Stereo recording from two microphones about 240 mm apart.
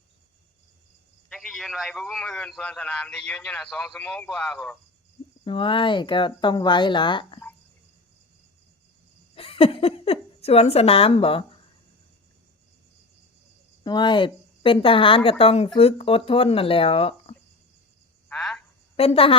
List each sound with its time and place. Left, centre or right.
1.3 s a man's voice: centre
5.5 s speech: left
9.3 s speech: left
13.8 s speech: centre
18.3 s frog: centre
18.9 s speech: left